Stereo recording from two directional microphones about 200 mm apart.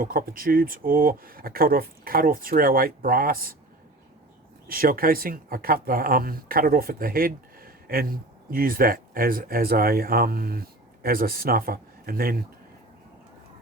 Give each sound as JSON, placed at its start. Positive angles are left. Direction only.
{"t": 0.0, "sound": "speech", "side_deg": -45}
{"t": 4.7, "sound": "speech", "side_deg": -45}